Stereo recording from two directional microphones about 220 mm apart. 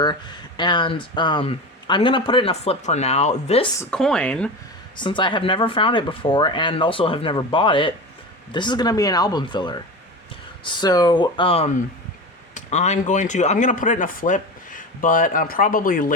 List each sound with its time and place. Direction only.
0.0 s speech: 20° left (ahead or behind)
3.8 s speech: 5° left (ahead or behind)
4.9 s speech: 20° left (ahead or behind); by 16.1 s 40° left (ahead or behind)